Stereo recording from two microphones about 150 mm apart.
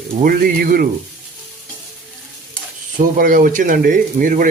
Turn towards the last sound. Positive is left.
turn(degrees=-65)  # may be behind; listen again after turning